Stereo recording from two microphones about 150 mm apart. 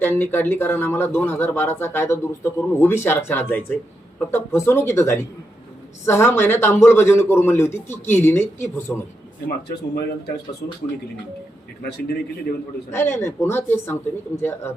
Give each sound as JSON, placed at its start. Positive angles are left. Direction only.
{"t": 0.0, "sound": "speech", "side_deg": 15}
{"t": 9.6, "sound": "speech", "side_deg": 90}
{"t": 11.8, "sound": "speech", "side_deg": 90}
{"t": 12.9, "sound": "speech", "side_deg": 15}